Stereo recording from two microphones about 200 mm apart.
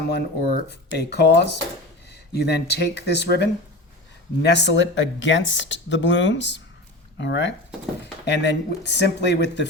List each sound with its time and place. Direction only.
0.0 s speech: 55° left (ahead or behind)